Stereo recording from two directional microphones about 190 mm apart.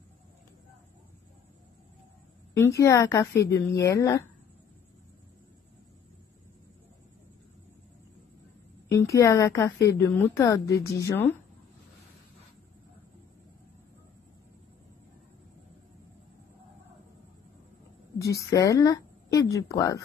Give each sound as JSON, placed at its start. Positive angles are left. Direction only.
{"t": 2.5, "sound": "speech", "side_deg": 15}
{"t": 8.9, "sound": "speech", "side_deg": 15}
{"t": 18.2, "sound": "speech", "side_deg": 15}